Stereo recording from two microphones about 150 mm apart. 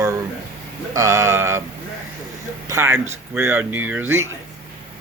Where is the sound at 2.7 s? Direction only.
15° right (ahead or behind).